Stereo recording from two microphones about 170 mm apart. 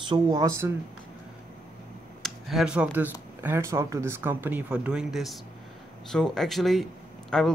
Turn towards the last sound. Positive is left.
turn(degrees=5)  # may be behind; listen again after turning